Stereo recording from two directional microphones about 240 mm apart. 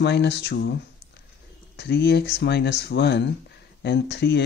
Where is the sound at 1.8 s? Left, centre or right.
Left.